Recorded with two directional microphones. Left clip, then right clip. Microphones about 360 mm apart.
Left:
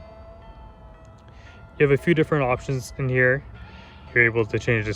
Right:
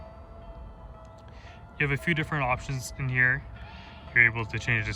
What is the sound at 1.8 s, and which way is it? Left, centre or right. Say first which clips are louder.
Speech: left 9 dB; centre.